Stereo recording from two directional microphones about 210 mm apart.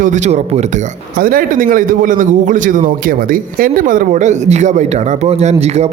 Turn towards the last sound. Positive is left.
turn(degrees=-30)  # may be behind; listen again after turning